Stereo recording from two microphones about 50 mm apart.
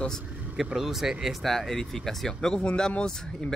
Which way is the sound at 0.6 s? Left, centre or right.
Centre.